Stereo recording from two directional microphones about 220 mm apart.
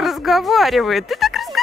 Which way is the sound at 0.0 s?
Centre (ahead or behind).